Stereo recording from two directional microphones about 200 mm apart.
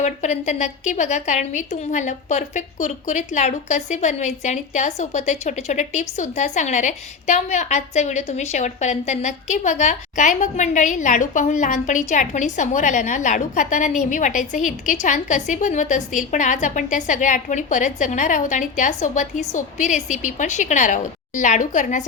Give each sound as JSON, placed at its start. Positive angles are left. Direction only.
{"t": 0.0, "sound": "a woman's voice", "side_deg": 35}